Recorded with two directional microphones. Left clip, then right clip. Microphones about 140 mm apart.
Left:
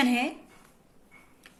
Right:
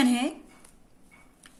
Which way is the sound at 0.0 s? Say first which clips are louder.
Even; 40° right (ahead or behind).